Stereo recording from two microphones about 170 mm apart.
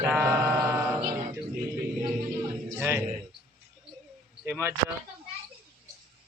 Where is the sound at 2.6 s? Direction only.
15° right (ahead or behind).